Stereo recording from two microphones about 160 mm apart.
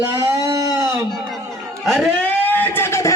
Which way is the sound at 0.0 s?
15° right (ahead or behind).